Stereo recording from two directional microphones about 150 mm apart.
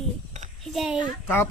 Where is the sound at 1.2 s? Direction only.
15° left (ahead or behind).